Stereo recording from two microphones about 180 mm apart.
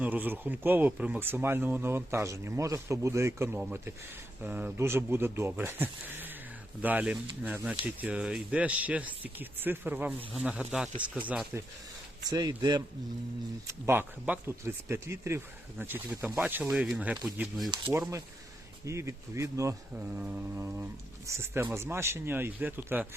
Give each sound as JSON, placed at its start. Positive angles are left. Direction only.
{"t": 0.0, "sound": "speech", "side_deg": -10}
{"t": 12.3, "sound": "speech", "side_deg": -20}